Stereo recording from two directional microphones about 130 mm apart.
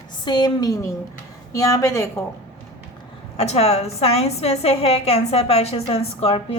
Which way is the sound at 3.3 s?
55° left (ahead or behind).